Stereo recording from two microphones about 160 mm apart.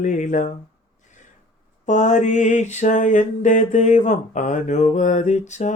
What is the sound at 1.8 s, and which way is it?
Mantra, 50° left (ahead or behind).